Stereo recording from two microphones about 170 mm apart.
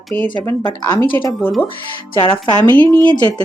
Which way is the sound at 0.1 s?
10° left (ahead or behind).